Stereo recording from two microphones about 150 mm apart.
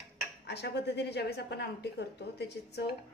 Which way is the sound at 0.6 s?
90° left.